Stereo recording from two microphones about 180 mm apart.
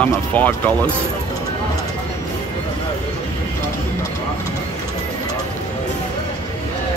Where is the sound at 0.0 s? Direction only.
10° left (ahead or behind).